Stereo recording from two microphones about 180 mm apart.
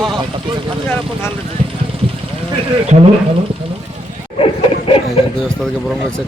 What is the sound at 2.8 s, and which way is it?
Speech, 40° right (ahead or behind).